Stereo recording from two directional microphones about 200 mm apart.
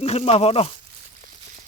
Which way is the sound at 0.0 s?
30° left (ahead or behind).